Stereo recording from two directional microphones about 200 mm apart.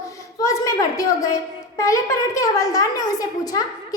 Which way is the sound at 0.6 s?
15° left (ahead or behind).